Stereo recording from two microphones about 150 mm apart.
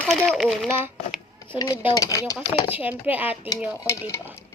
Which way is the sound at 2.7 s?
10° right (ahead or behind).